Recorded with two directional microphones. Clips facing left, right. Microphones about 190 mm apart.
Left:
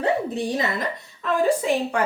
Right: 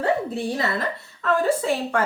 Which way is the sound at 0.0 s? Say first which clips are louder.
Even; 20° left (ahead or behind).